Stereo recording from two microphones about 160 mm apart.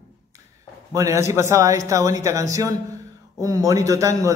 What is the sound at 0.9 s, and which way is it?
A man's voice, 20° right (ahead or behind).